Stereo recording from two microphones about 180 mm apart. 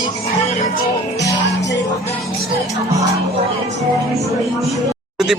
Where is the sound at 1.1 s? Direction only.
20° left (ahead or behind).